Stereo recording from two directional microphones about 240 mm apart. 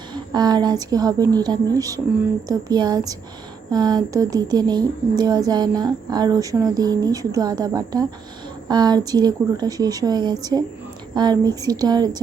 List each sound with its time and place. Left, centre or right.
0.1 s a woman's voice: centre